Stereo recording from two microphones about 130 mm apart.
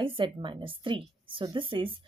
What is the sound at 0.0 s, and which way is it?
A woman's voice, 40° right (ahead or behind).